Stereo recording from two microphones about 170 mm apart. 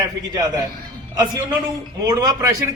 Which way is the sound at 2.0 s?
25° right (ahead or behind).